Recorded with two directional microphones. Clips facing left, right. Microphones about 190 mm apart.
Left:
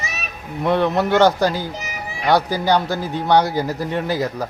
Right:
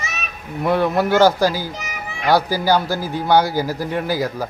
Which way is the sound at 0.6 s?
5° right (ahead or behind).